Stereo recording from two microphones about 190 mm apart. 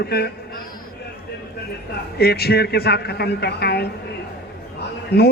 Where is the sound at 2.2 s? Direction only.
55° left (ahead or behind).